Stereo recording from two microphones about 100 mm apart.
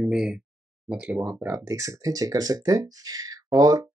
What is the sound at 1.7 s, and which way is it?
Speech, 35° right (ahead or behind).